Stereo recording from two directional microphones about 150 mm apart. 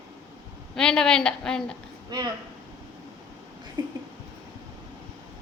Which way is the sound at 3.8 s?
30° right (ahead or behind).